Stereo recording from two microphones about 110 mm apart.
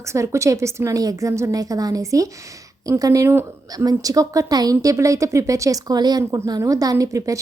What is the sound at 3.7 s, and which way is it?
Speech, 35° right (ahead or behind).